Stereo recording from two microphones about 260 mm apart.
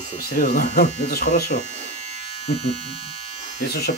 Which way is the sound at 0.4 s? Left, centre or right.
Left.